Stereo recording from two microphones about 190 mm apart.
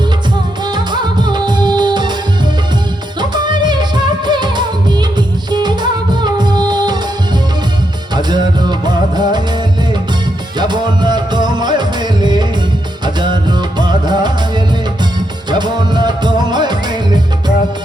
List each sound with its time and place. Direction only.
0.7 s music: 25° right (ahead or behind)
3.2 s music: 25° right (ahead or behind)
8.8 s music: 25° right (ahead or behind)
10.6 s music: 25° right (ahead or behind)
15.4 s music: 25° right (ahead or behind)